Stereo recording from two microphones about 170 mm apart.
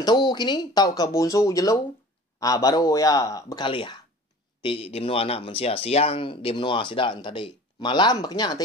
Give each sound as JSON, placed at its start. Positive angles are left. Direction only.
{"t": 0.0, "sound": "speech", "side_deg": 25}